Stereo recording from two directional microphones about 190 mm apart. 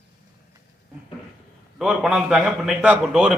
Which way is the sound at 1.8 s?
5° right (ahead or behind).